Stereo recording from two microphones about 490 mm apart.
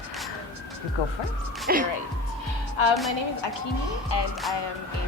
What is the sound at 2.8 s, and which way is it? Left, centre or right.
Speech, left.